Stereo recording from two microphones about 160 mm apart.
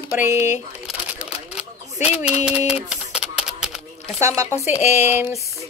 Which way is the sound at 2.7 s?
5° right (ahead or behind).